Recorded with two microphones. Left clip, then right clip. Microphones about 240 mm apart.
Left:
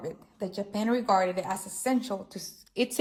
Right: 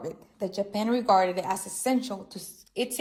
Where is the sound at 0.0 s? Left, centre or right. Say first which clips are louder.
Right 2 dB; centre.